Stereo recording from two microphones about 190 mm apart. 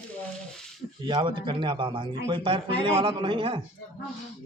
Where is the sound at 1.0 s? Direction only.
25° right (ahead or behind).